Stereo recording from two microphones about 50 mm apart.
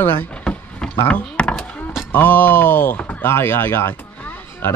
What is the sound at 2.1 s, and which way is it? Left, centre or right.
Speech, left.